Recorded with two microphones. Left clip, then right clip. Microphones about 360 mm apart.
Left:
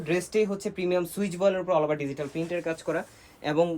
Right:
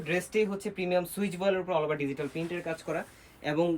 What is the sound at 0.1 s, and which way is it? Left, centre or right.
Speech, centre.